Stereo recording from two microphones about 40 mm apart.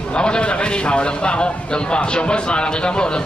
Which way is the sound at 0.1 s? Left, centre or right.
Left.